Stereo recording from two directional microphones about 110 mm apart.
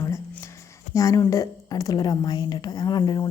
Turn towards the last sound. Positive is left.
turn(degrees=40)  # may be behind; listen again after turning